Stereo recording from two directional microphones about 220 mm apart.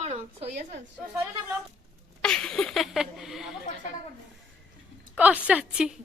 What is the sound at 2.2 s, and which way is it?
Speech, 5° left (ahead or behind).